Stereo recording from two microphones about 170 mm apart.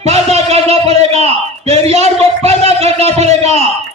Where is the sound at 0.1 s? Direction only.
40° right (ahead or behind).